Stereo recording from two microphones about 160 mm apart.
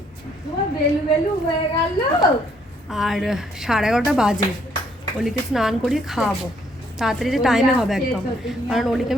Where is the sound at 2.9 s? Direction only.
Centre (ahead or behind).